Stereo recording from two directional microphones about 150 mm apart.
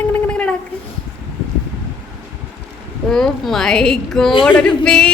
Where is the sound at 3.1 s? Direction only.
5° left (ahead or behind).